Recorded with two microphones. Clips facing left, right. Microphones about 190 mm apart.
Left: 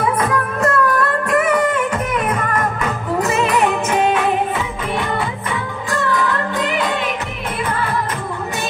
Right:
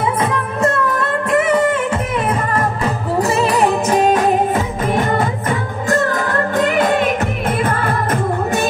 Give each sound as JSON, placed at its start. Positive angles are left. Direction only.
{"t": 0.0, "sound": "music", "side_deg": -25}